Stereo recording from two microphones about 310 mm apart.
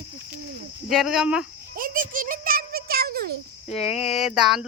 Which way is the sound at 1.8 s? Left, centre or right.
Right.